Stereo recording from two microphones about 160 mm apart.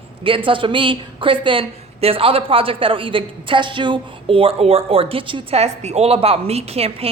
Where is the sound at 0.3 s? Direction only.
35° right (ahead or behind).